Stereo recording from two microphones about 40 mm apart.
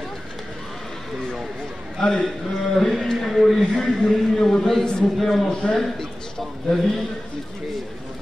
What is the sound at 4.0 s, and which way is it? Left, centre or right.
A man's voice, centre.